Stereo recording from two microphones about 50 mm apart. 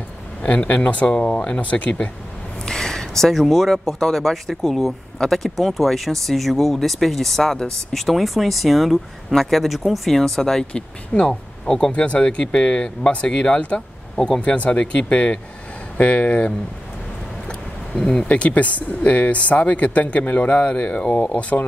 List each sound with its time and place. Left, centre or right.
0.4 s speech: left
2.6 s a sound: centre
3.4 s speech: centre
11.1 s speech: left
11.6 s speech: centre
11.9 s speech: left
17.5 s a sound: centre
18.2 s speech: left